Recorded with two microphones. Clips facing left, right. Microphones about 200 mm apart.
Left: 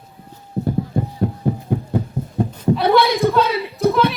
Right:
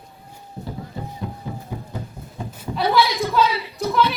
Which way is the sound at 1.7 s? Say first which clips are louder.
Left 11 dB; 60° left (ahead or behind).